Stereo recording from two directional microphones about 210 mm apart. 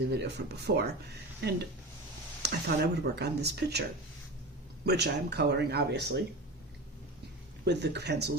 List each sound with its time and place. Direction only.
0.0 s speech: 50° right (ahead or behind)
4.9 s speech: 50° right (ahead or behind)
7.6 s speech: 55° right (ahead or behind)